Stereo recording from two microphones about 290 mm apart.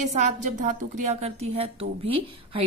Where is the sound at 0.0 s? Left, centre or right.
Right.